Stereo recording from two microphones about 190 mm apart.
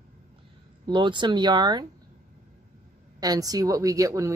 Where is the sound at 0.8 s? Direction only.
25° right (ahead or behind).